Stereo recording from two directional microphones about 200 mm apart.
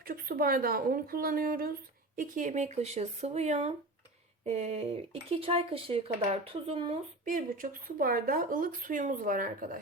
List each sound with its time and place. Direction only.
0.0 s speech: 50° right (ahead or behind); by 7.0 s 30° right (ahead or behind)
7.3 s speech: 40° right (ahead or behind)